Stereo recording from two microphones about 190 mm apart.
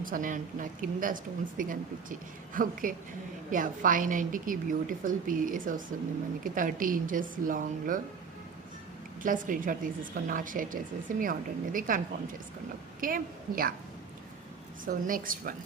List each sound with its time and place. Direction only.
0.0 s speech: 45° right (ahead or behind)
9.2 s speech: 45° right (ahead or behind)
14.8 s speech: 45° right (ahead or behind)